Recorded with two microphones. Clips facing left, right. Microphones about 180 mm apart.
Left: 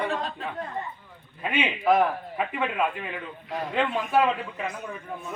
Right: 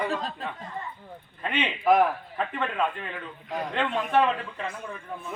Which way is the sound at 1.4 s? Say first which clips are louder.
Even; 10° left (ahead or behind).